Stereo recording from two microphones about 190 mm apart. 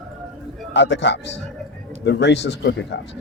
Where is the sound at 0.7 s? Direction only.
65° left (ahead or behind).